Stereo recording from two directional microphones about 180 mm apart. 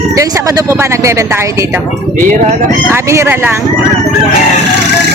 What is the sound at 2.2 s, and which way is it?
Speech, 40° right (ahead or behind).